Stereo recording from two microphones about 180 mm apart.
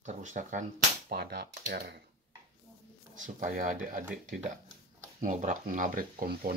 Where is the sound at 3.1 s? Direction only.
45° right (ahead or behind).